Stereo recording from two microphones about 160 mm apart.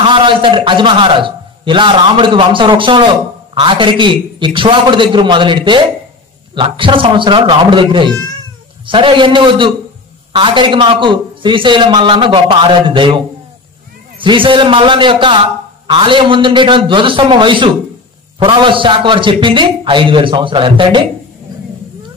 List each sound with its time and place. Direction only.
0.0 s a man's voice: 30° right (ahead or behind)
14.2 s a man's voice: 30° right (ahead or behind)